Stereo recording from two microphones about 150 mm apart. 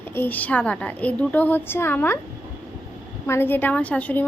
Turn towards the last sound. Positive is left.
turn(degrees=10)  # may be behind; listen again after turning